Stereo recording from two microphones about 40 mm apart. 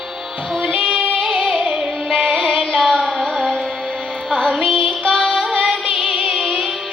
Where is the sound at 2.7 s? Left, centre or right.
Centre.